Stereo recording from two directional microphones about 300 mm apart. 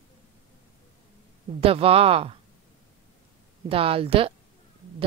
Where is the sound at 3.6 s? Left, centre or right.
Centre.